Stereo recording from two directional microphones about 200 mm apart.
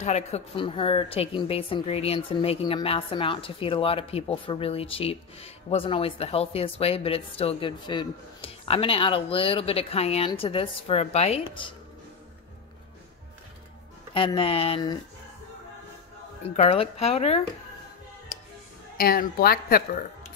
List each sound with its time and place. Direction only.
0.0 s speech: 35° left (ahead or behind)
14.1 s speech: 25° left (ahead or behind)
16.4 s speech: 30° left (ahead or behind)
18.9 s a woman's voice: 50° left (ahead or behind)